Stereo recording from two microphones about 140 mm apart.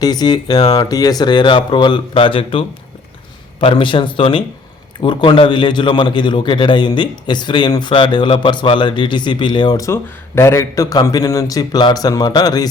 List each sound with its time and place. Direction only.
0.0 s a man's voice: 30° left (ahead or behind)